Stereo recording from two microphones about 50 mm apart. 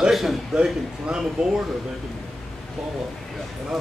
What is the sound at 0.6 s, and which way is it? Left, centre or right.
Speech, centre.